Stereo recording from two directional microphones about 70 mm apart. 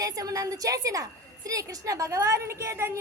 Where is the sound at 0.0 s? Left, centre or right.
Right.